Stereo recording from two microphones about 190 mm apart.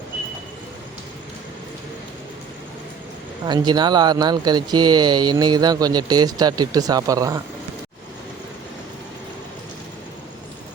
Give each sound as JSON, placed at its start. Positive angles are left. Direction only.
{"t": 3.4, "sound": "speech", "side_deg": -25}